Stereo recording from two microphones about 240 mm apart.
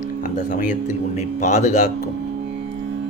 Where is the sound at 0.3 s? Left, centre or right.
Left.